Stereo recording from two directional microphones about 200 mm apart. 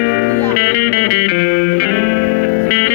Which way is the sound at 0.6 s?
50° left (ahead or behind).